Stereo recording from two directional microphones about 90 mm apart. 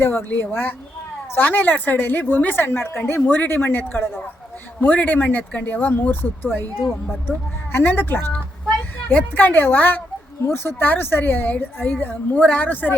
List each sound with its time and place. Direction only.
0.0 s a woman's voice: 25° left (ahead or behind)
7.7 s a woman's voice: 20° left (ahead or behind)